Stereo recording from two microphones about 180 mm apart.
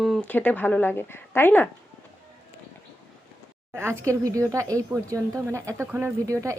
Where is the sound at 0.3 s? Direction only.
10° left (ahead or behind).